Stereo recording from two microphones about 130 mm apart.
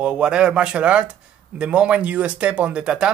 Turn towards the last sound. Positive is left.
turn(degrees=-5)  # may be behind; listen again after turning